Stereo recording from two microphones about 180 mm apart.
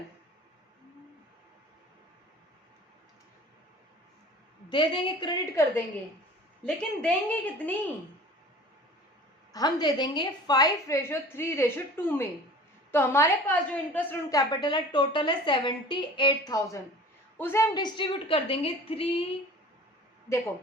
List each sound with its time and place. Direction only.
4.7 s a woman's voice: 25° left (ahead or behind)
6.7 s a woman's voice: 5° left (ahead or behind)
9.5 s a woman's voice: 20° left (ahead or behind)
14.3 s a woman's voice: 20° left (ahead or behind)